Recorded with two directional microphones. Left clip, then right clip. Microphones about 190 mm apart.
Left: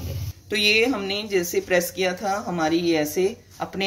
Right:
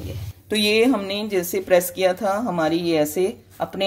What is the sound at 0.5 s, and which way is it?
A woman's voice, 60° right (ahead or behind).